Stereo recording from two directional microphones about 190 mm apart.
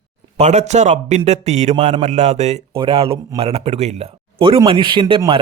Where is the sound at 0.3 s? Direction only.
35° right (ahead or behind).